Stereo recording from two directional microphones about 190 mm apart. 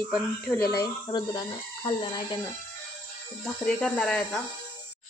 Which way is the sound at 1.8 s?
25° left (ahead or behind).